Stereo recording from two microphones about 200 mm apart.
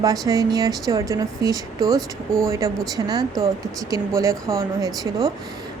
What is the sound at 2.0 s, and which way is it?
Speech, centre (ahead or behind).